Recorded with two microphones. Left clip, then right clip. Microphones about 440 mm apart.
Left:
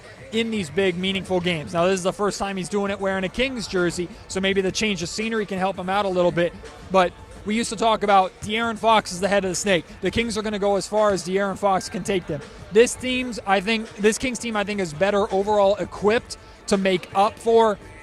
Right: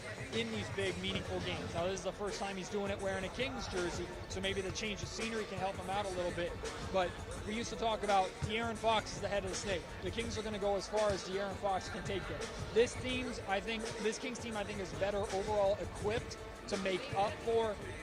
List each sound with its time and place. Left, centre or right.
0.3 s speech: left